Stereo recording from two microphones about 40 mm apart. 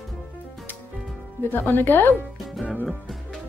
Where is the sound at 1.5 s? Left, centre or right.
Left.